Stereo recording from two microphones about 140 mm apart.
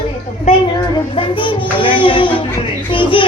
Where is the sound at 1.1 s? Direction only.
35° left (ahead or behind).